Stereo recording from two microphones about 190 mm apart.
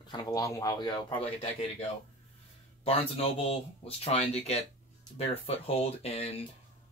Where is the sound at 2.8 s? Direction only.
30° left (ahead or behind).